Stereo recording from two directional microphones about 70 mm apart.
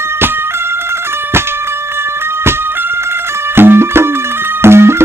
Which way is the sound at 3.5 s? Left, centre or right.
Right.